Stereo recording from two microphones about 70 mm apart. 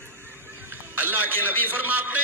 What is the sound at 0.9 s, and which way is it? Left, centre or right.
A man's voice, right.